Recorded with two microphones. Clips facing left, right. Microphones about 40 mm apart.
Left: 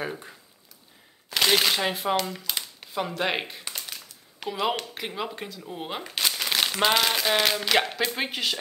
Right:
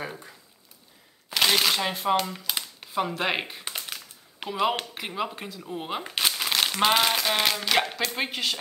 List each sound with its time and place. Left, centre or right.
0.0 s speech: centre
1.4 s speech: centre
3.6 s a sound: right
4.9 s speech: centre
6.0 s crumpling: centre
6.3 s speech: centre